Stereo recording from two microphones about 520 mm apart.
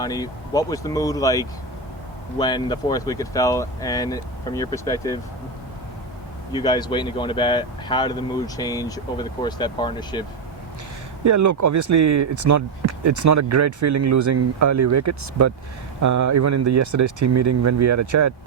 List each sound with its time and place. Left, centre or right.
0.0 s speech: centre
6.6 s speech: centre
11.2 s speech: right